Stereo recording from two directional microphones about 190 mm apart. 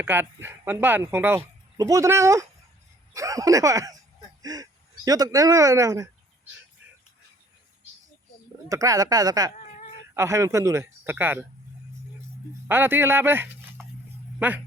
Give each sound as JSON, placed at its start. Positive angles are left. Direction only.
{"t": 0.0, "sound": "speech", "side_deg": -10}
{"t": 8.7, "sound": "speech", "side_deg": -15}
{"t": 12.6, "sound": "speech", "side_deg": -10}